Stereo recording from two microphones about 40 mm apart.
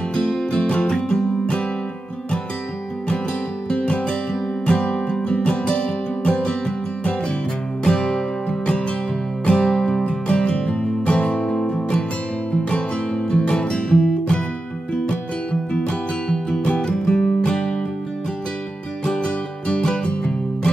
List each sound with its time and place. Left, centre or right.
0.1 s music: centre
3.6 s music: left
7.8 s music: left
19.0 s music: left